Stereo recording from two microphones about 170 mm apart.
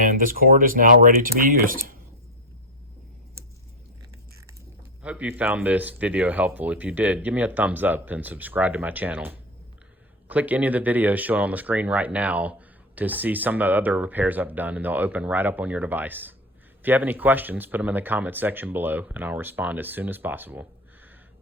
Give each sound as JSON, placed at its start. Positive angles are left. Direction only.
{"t": 0.0, "sound": "speech", "side_deg": -55}
{"t": 5.0, "sound": "speech", "side_deg": -5}